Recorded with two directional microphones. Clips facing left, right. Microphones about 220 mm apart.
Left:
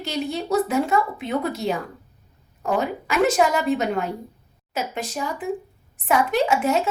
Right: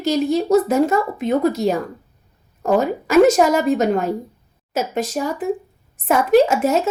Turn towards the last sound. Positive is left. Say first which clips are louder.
# right 5 dB
turn(degrees=-45)  # may be behind; listen again after turning